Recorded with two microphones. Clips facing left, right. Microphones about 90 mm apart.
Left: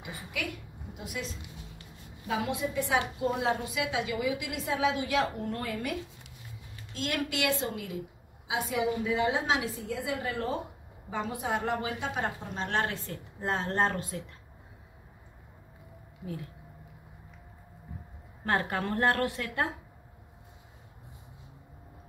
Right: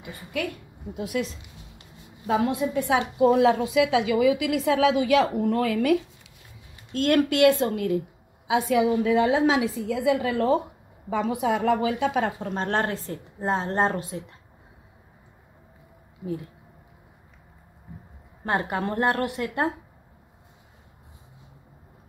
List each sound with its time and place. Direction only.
0.9 s a woman's voice: 60° right (ahead or behind)
3.2 s a woman's voice: 90° right
6.9 s a woman's voice: 55° right (ahead or behind)
8.5 s a woman's voice: 70° right (ahead or behind); by 12.5 s 90° right
12.5 s a woman's voice: 40° right (ahead or behind); by 14.2 s 25° right (ahead or behind)
18.4 s a woman's voice: 25° right (ahead or behind)